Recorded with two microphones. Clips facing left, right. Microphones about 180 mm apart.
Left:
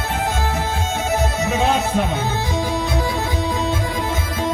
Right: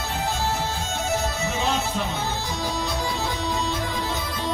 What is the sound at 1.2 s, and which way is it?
Music, 55° left (ahead or behind).